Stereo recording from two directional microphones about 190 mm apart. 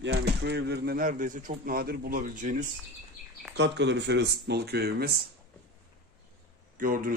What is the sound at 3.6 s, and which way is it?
Speech, 65° right (ahead or behind).